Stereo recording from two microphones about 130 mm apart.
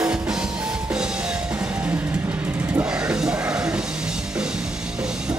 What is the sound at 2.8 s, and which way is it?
Music, 5° right (ahead or behind).